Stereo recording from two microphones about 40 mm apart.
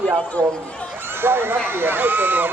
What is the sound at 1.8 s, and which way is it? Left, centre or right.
Speech, right.